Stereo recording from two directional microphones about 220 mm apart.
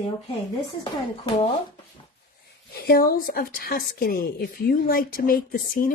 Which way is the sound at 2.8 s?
45° left (ahead or behind).